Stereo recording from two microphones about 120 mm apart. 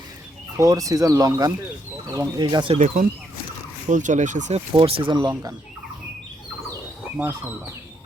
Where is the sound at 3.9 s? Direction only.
90° right.